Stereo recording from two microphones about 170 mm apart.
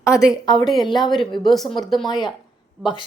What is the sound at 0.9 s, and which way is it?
Speech, 25° left (ahead or behind).